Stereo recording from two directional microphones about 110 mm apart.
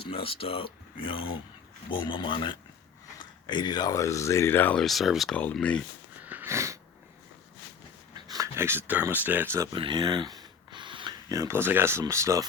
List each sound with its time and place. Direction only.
0.0 s speech: 55° left (ahead or behind); by 4.8 s 15° left (ahead or behind)
4.8 s speech: centre (ahead or behind)
5.3 s speech: 10° left (ahead or behind)
6.2 s sniff: 20° right (ahead or behind)
8.5 s speech: 20° right (ahead or behind)
9.7 s a sound: 45° right (ahead or behind)
11.3 s speech: 30° right (ahead or behind)